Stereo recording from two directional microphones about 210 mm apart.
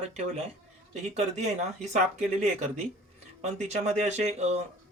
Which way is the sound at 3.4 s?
30° right (ahead or behind).